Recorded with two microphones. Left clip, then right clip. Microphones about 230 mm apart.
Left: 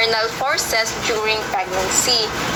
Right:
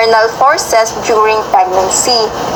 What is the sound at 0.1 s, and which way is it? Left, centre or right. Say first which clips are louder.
A woman's voice: right 11 dB; centre.